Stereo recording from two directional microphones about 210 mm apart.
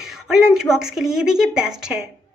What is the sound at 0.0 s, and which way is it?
Speech, centre (ahead or behind).